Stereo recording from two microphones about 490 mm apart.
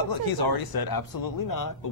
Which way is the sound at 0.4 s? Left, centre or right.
Left.